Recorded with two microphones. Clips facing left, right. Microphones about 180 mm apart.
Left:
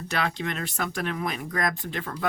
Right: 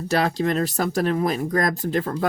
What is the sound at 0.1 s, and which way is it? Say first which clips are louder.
Speech: right 8 dB; 40° right (ahead or behind).